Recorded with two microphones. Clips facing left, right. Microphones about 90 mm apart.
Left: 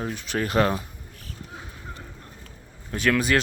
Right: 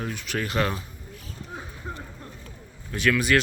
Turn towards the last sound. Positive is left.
turn(degrees=35)  # may be behind; listen again after turning